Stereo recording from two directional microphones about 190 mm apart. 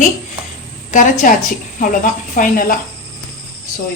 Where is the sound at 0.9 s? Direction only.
40° left (ahead or behind).